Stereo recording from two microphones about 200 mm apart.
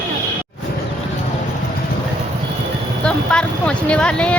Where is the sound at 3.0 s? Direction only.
5° left (ahead or behind).